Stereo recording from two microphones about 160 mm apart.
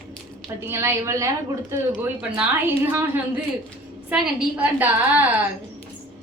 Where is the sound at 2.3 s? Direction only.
10° right (ahead or behind).